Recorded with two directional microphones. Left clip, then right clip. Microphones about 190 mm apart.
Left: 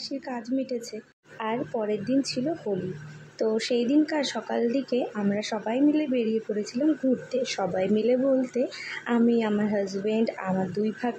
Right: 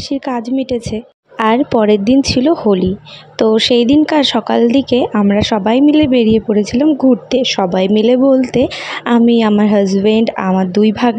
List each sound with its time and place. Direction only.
0.3 s a woman's voice: 40° right (ahead or behind)
1.4 s speech: 50° right (ahead or behind)